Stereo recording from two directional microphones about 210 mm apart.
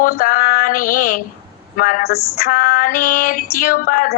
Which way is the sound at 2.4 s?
40° left (ahead or behind).